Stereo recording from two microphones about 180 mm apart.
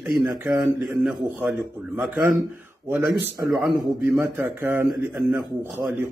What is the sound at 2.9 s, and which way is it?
Speech, centre (ahead or behind).